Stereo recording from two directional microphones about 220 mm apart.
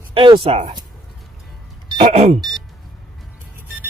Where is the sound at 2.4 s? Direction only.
20° right (ahead or behind).